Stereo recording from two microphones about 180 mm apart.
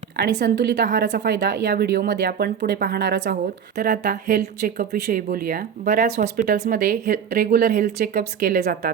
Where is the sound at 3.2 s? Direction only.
50° right (ahead or behind).